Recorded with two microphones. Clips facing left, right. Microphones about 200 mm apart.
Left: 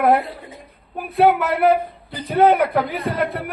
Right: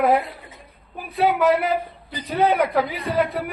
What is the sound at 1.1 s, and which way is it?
A man's voice, 60° left (ahead or behind).